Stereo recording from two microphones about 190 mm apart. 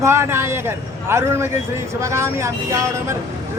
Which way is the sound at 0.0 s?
15° right (ahead or behind).